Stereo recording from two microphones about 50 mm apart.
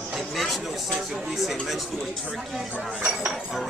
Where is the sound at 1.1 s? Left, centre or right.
Centre.